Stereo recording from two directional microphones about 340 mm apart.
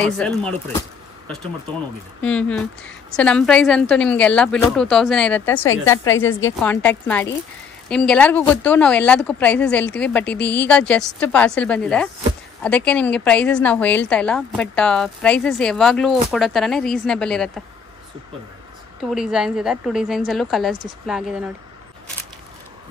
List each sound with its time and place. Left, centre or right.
0.0 s a woman's voice: centre
2.2 s a woman's voice: centre
6.1 s a woman's voice: left
6.6 s a woman's voice: centre
19.0 s a woman's voice: centre